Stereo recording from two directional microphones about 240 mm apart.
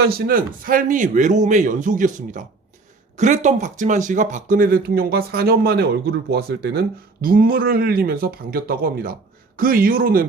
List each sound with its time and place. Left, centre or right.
0.2 s speech: right